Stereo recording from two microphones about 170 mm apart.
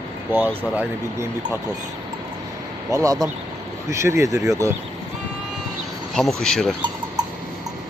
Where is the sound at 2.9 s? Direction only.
20° right (ahead or behind).